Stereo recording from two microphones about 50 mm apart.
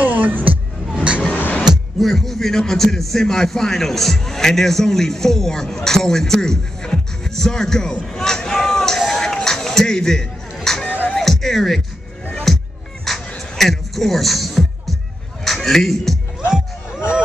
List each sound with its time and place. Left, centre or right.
0.0 s music: right
0.9 s vehicle: right
1.3 s music: left
2.0 s a man's voice: centre
8.1 s a sound: centre
11.1 s music: centre
15.4 s a sound: centre
16.3 s music: centre